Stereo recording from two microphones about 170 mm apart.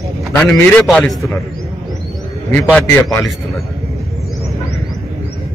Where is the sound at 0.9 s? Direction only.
Centre (ahead or behind).